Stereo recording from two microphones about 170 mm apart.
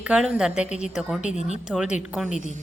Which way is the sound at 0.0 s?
5° right (ahead or behind).